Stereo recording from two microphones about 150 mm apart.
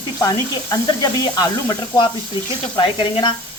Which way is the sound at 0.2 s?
25° left (ahead or behind).